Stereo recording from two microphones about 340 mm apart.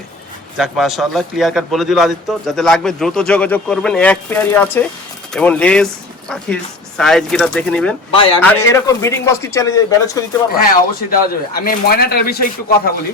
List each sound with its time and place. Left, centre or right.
0.5 s a man's voice: centre
8.1 s a man's voice: centre
10.7 s speech: left